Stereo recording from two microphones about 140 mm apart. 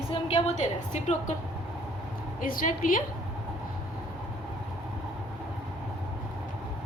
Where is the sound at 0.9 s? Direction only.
55° left (ahead or behind).